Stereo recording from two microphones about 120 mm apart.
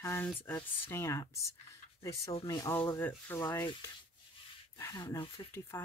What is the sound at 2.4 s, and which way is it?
Speech, 30° left (ahead or behind).